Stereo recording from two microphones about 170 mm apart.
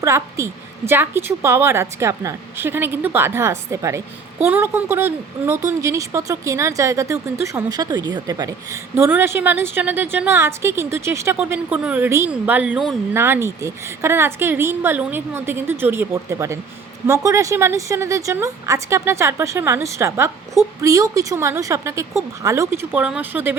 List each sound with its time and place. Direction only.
0.0 s a woman's voice: 15° right (ahead or behind)